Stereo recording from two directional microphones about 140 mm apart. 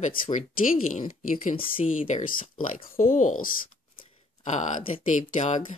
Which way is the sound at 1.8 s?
65° left (ahead or behind).